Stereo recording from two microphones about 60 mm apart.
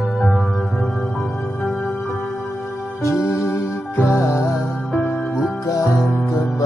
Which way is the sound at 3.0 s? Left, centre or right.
Left.